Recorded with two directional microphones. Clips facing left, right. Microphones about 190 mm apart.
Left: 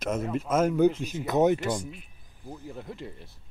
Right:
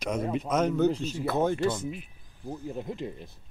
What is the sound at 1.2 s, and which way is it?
Speech, 20° left (ahead or behind).